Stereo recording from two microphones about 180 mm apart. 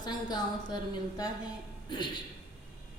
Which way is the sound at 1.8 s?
25° left (ahead or behind).